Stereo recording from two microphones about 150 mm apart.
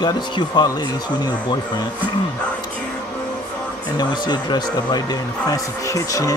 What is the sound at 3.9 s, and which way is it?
Speech, 30° left (ahead or behind).